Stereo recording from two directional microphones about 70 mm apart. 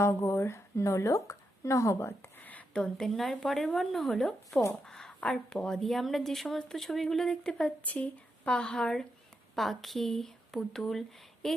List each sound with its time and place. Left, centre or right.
0.0 s a woman's voice: left; by 2.9 s centre
3.0 s a woman's voice: centre
7.9 s a woman's voice: centre